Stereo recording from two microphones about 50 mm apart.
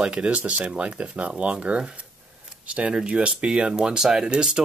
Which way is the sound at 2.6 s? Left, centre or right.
Right.